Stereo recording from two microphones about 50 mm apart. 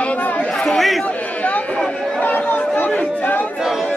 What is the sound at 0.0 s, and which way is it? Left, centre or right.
Chatter, left.